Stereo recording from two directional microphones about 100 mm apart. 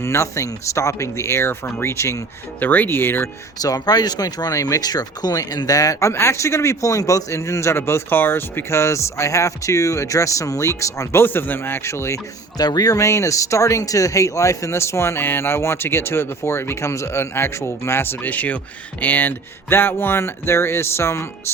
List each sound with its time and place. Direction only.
0.0 s speech: 30° left (ahead or behind)
2.6 s speech: 15° left (ahead or behind)
3.6 s speech: 40° left (ahead or behind)
12.5 s speech: 40° left (ahead or behind)